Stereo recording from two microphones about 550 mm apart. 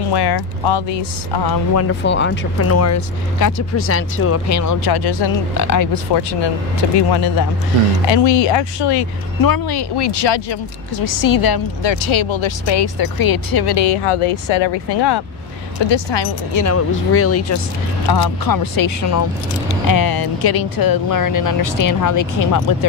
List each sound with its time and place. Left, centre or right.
0.0 s a woman's voice: left
1.8 s a woman's voice: left
8.1 s a woman's voice: left
11.1 s a woman's voice: left
16.5 s speech: left
18.0 s speech: left